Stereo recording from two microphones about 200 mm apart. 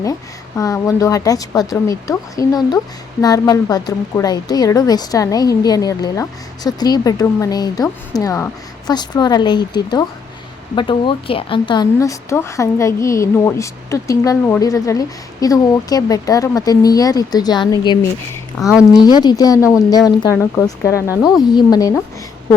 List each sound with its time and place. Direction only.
0.0 s a woman's voice: 15° left (ahead or behind)
18.6 s speech: 5° right (ahead or behind)
19.0 s a woman's voice: 20° left (ahead or behind)
21.2 s speech: centre (ahead or behind)
21.5 s a woman's voice: 20° left (ahead or behind)